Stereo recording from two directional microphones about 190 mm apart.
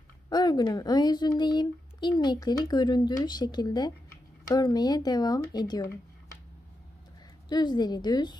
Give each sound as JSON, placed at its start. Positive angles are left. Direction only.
{"t": 0.3, "sound": "speech", "side_deg": 20}
{"t": 7.4, "sound": "speech", "side_deg": 20}